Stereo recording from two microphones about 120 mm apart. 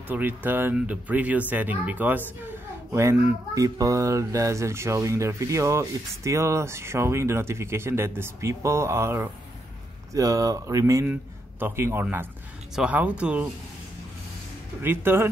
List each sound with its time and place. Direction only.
0.1 s a child's voice: 15° right (ahead or behind)
14.8 s speech: 20° right (ahead or behind)